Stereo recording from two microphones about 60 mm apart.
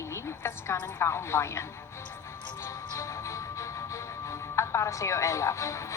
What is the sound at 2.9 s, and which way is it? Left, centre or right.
Music, left.